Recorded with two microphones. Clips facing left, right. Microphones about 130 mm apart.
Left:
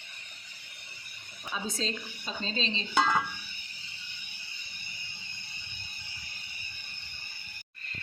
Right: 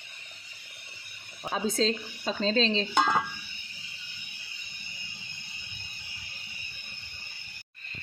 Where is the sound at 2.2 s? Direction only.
90° right.